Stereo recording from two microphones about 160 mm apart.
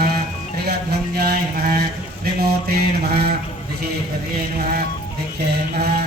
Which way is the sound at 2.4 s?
75° right (ahead or behind).